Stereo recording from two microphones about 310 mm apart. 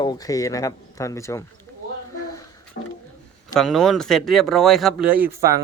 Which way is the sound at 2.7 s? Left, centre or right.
Left.